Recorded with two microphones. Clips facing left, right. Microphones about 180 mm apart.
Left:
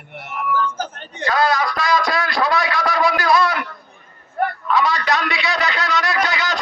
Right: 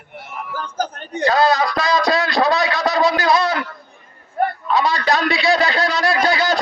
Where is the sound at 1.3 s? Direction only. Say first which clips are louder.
Right 2 dB; 25° right (ahead or behind).